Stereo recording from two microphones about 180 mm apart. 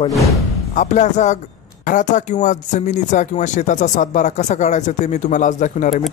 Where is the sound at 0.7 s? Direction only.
40° left (ahead or behind).